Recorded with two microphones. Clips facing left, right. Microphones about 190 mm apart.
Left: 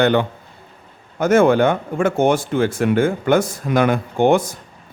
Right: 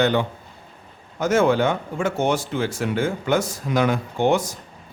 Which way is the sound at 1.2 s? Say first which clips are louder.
Left 5 dB; 55° left (ahead or behind).